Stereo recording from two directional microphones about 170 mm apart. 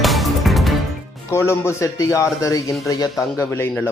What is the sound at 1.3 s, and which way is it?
A man's voice, 15° left (ahead or behind).